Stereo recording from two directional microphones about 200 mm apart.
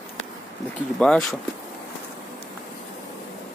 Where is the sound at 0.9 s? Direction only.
5° left (ahead or behind).